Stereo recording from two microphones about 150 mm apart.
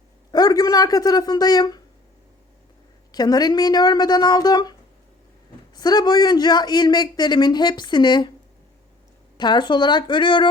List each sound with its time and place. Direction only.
0.3 s speech: 25° left (ahead or behind)
3.1 s a man's voice: 25° left (ahead or behind)
5.7 s a man's voice: 30° left (ahead or behind)
9.4 s speech: 30° left (ahead or behind)